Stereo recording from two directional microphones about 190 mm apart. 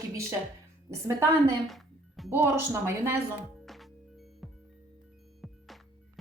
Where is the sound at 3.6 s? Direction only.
Centre (ahead or behind).